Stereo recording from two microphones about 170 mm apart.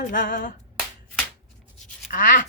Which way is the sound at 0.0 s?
55° left (ahead or behind).